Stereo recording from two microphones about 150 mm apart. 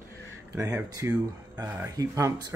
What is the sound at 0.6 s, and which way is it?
Speech, 20° right (ahead or behind).